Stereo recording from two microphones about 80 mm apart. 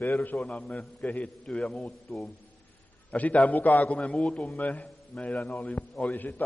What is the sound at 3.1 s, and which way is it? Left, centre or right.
A man's voice, centre.